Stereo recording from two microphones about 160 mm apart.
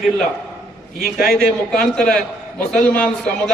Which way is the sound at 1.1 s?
65° left (ahead or behind).